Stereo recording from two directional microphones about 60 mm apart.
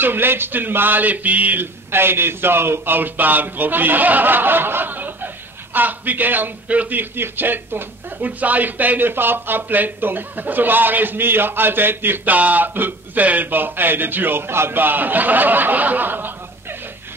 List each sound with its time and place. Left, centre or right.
0.0 s speech: right
1.9 s speech: right